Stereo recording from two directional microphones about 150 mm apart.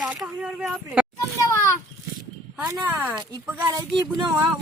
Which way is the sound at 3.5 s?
20° right (ahead or behind).